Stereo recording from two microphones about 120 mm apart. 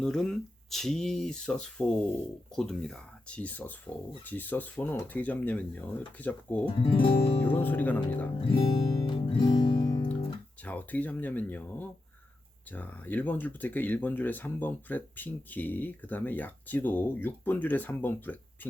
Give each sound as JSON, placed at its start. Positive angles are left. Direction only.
{"t": 0.0, "sound": "speech", "side_deg": 5}
{"t": 6.7, "sound": "music", "side_deg": 50}
{"t": 7.4, "sound": "speech", "side_deg": 15}
{"t": 8.4, "sound": "music", "side_deg": 50}
{"t": 10.6, "sound": "speech", "side_deg": 10}